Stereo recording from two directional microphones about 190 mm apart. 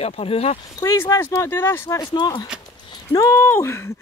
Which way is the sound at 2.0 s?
25° left (ahead or behind).